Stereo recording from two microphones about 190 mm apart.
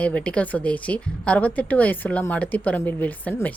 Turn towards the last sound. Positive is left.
turn(degrees=10)  # may be behind; listen again after turning